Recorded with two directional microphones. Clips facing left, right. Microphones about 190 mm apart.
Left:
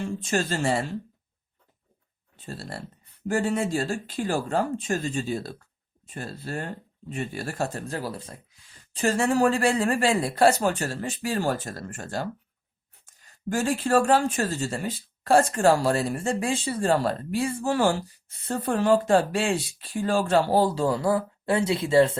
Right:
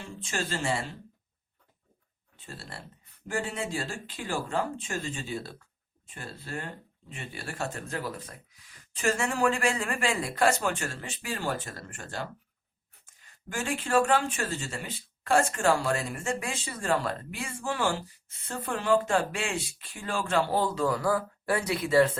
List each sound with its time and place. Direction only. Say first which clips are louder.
0.2 s speech: left 4 dB; 40° left (ahead or behind)
2.3 s speech: left 7 dB; 40° left (ahead or behind)